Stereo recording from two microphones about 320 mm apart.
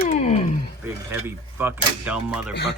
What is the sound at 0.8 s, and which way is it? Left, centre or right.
Speech, centre.